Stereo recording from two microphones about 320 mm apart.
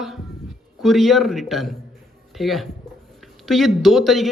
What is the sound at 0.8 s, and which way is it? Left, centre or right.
Speech, centre.